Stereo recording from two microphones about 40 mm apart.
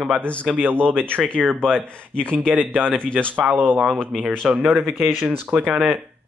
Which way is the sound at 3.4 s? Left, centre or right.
Right.